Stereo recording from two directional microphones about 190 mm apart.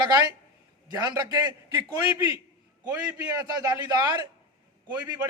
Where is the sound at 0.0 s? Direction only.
20° right (ahead or behind).